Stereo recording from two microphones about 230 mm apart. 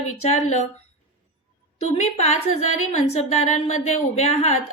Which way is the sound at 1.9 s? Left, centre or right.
Left.